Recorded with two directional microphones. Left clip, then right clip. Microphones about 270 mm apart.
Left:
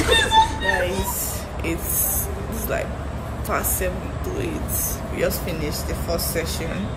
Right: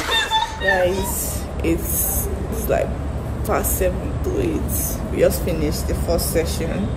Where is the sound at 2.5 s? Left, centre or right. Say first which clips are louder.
Right 6 dB; centre.